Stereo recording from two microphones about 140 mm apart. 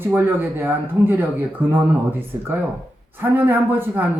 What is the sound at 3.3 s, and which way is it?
Speech, 15° right (ahead or behind).